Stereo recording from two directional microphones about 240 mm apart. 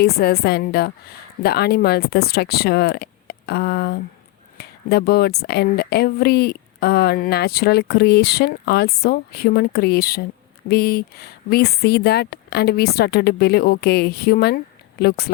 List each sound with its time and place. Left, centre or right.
0.0 s speech: left